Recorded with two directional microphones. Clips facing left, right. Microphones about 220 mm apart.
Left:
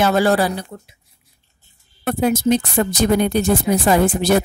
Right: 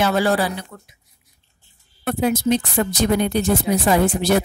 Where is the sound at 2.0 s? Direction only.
45° left (ahead or behind).